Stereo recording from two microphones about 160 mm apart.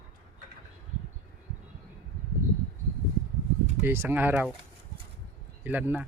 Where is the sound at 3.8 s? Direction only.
15° right (ahead or behind).